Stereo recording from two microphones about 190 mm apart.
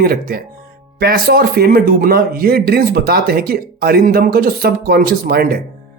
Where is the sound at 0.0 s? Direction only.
50° right (ahead or behind).